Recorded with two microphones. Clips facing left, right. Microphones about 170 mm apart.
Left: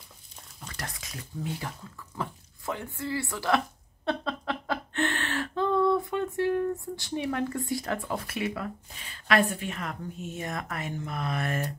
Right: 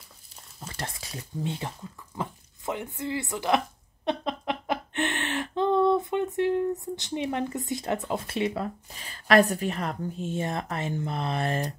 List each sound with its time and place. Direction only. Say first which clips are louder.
0.6 s a sound: right 3 dB; 25° right (ahead or behind)
7.0 s a woman's voice: right 1 dB; 20° right (ahead or behind)
9.1 s a woman's voice: right 5 dB; 40° right (ahead or behind)